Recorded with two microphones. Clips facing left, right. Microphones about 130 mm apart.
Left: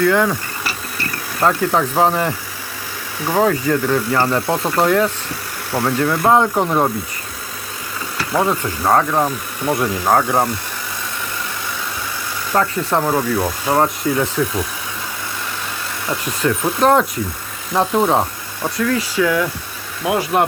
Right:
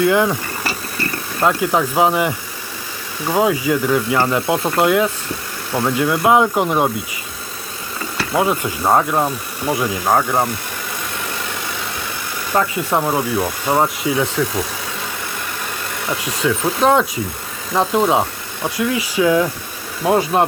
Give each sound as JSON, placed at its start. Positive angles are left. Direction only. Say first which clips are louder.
{"t": 0.0, "sound": "speech", "louder": "even", "side_deg": -15}
{"t": 1.6, "sound": "speech", "louder": "even", "side_deg": -10}
{"t": 8.4, "sound": "speech", "louder": "even", "side_deg": -10}
{"t": 12.5, "sound": "speech", "louder": "even", "side_deg": -5}
{"t": 16.2, "sound": "speech", "louder": "even", "side_deg": 0}
{"t": 18.9, "sound": "speech", "louder": "right 2 dB", "side_deg": -15}